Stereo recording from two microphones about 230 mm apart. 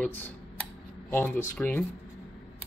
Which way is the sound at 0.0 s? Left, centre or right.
Centre.